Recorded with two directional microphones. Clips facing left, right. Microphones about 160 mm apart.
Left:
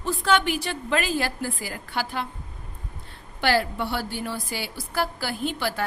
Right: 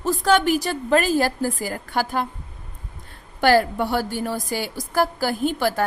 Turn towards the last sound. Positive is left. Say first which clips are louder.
# right 6 dB
turn(degrees=-45)  # may be behind; listen again after turning